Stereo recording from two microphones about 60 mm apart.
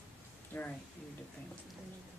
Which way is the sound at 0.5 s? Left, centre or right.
Left.